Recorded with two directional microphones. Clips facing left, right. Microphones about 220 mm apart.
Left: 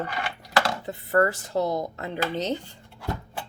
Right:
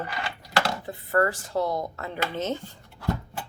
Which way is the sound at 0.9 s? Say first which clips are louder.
Left 2 dB; 30° left (ahead or behind).